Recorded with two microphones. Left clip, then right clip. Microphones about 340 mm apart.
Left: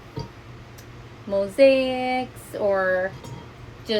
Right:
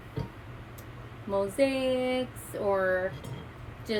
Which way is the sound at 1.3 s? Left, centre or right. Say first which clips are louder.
Left 10 dB; centre.